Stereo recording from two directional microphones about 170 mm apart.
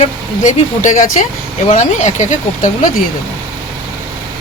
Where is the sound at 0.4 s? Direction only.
45° left (ahead or behind).